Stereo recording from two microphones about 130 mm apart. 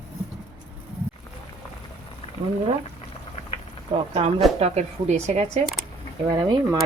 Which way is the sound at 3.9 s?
55° right (ahead or behind).